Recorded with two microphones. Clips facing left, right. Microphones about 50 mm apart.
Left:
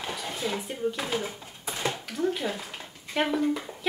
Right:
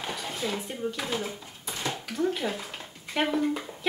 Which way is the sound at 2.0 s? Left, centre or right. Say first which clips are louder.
Right 3 dB; centre.